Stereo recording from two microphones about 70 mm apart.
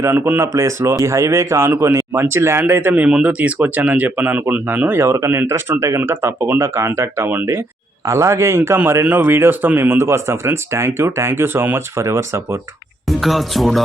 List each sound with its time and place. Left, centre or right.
0.3 s a man's voice: right
5.1 s a man's voice: right
9.0 s speech: right
13.1 s speech: centre